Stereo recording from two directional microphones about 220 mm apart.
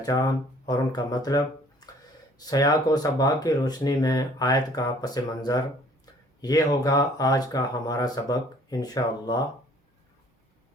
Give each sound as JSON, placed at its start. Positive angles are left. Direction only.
{"t": 0.0, "sound": "speech", "side_deg": 15}
{"t": 2.5, "sound": "speech", "side_deg": 15}